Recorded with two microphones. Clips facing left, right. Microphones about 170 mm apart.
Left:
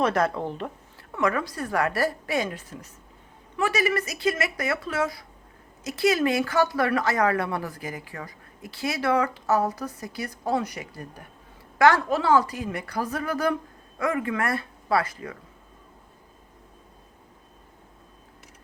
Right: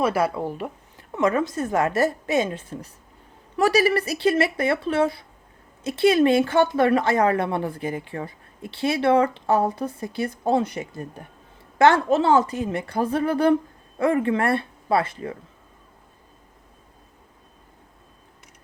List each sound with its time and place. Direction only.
0.0 s speech: 5° right (ahead or behind)
1.1 s speech: 25° right (ahead or behind)